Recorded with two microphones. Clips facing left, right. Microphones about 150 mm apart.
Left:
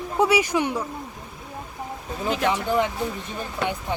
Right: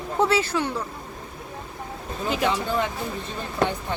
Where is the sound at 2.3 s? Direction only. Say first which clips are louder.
Left 1 dB; 5° right (ahead or behind).